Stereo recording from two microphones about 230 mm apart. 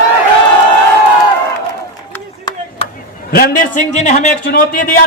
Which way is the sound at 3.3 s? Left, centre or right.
Left.